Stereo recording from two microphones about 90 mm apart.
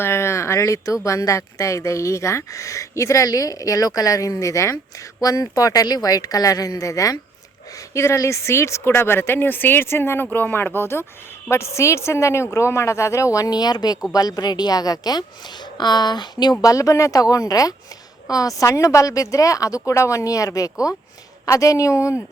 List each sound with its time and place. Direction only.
0.0 s speech: 30° left (ahead or behind)